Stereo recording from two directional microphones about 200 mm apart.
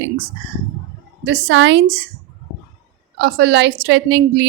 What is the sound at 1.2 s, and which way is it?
Speech, 70° right (ahead or behind).